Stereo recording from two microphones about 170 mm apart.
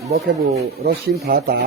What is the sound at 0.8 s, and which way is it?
Speech, 65° right (ahead or behind).